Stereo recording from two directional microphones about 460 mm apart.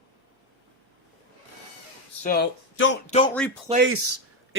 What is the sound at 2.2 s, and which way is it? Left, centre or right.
Speech, centre.